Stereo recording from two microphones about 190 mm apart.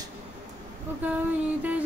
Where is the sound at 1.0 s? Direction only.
10° right (ahead or behind).